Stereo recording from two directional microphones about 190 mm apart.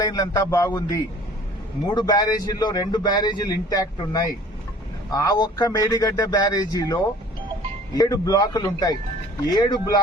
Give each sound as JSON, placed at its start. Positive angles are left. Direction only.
{"t": 0.0, "sound": "a man's voice", "side_deg": 20}